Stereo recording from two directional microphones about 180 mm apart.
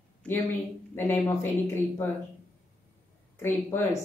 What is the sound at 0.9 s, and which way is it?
A woman's voice, 10° left (ahead or behind).